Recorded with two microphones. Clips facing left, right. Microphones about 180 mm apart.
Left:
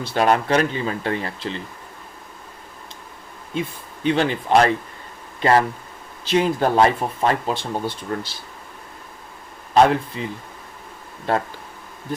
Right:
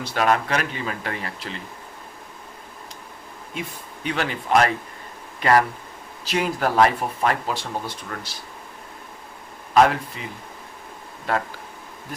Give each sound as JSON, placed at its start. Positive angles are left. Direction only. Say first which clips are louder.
{"t": 0.0, "sound": "speech", "louder": "left 3 dB", "side_deg": 30}
{"t": 3.5, "sound": "speech", "louder": "left 6 dB", "side_deg": 30}
{"t": 9.7, "sound": "speech", "louder": "left 2 dB", "side_deg": 30}
{"t": 11.3, "sound": "speech", "louder": "left 3 dB", "side_deg": 30}